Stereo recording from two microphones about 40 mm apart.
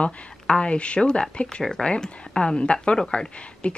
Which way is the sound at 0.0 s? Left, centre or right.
Left.